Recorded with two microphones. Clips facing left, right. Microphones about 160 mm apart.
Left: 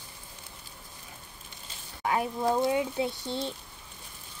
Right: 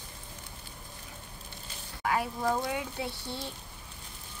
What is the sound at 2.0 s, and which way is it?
Speech, 25° left (ahead or behind).